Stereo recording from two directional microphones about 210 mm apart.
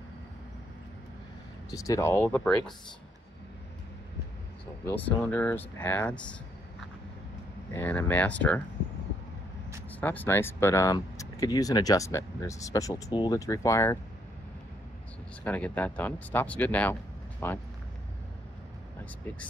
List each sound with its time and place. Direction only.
1.7 s speech: 15° left (ahead or behind)
4.8 s speech: 10° left (ahead or behind)
7.7 s speech: 10° left (ahead or behind)
9.9 s speech: 10° left (ahead or behind)
15.4 s speech: 5° left (ahead or behind)